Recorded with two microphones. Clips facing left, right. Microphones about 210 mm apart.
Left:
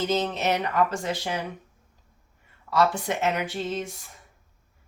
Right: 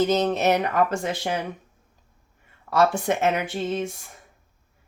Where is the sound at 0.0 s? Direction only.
45° right (ahead or behind).